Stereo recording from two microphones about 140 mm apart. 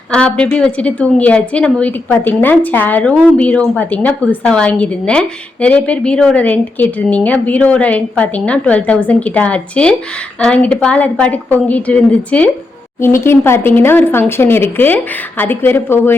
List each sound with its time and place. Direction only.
0.1 s a woman's voice: 5° left (ahead or behind)